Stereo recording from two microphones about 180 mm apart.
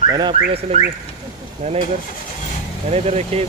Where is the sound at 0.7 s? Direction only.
35° right (ahead or behind).